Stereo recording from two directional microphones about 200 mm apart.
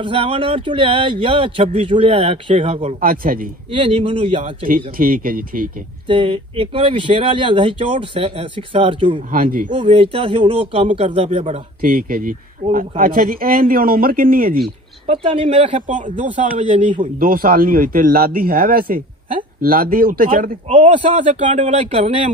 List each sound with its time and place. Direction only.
0.0 s speech: 25° right (ahead or behind); by 3.4 s 45° right (ahead or behind)
3.7 s speech: 25° right (ahead or behind)
4.6 s speech: 45° right (ahead or behind)
6.0 s speech: 25° right (ahead or behind)
9.3 s speech: 45° right (ahead or behind)
9.7 s speech: 30° right (ahead or behind); by 14.6 s 45° right (ahead or behind)
15.0 s speech: 25° right (ahead or behind)
16.2 s a man's voice: 40° right (ahead or behind)